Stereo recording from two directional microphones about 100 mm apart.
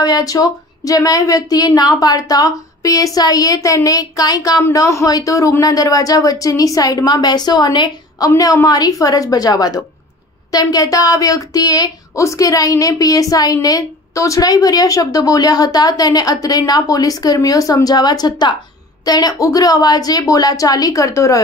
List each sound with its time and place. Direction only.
0.0 s a woman's voice: 40° left (ahead or behind)